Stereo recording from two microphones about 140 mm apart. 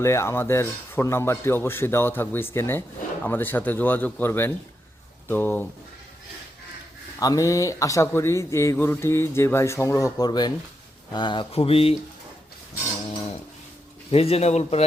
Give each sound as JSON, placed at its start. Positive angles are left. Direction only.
{"t": 0.0, "sound": "speech", "side_deg": 20}
{"t": 7.2, "sound": "speech", "side_deg": 25}
{"t": 14.1, "sound": "speech", "side_deg": 45}